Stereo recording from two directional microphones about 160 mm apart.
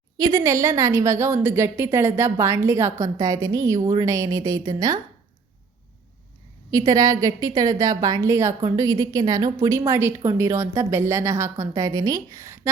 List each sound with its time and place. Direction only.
0.2 s a woman's voice: 20° right (ahead or behind)
6.7 s a woman's voice: 20° right (ahead or behind)